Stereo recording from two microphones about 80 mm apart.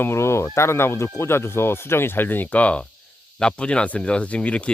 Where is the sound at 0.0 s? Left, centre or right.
Left.